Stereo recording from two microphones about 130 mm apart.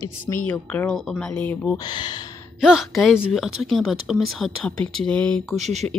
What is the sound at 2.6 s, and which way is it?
A woman's voice, 5° right (ahead or behind).